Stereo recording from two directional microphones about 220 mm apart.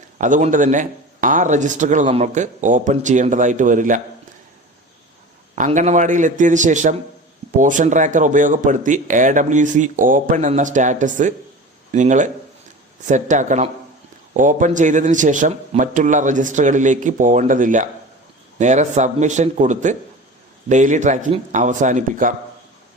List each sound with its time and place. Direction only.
0.2 s a man's voice: 35° right (ahead or behind)
5.5 s a man's voice: 35° right (ahead or behind)